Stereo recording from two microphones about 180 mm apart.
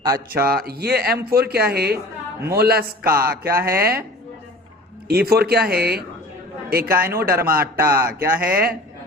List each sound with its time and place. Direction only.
0.0 s a man's voice: 20° right (ahead or behind)
0.4 s speech: 55° right (ahead or behind)
3.6 s speech: 15° right (ahead or behind)
5.0 s a man's voice: 60° right (ahead or behind)
7.8 s speech: 15° right (ahead or behind)
8.4 s speech: 55° right (ahead or behind)